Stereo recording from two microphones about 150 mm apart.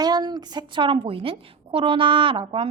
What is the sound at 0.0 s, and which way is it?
A woman's voice, 30° right (ahead or behind).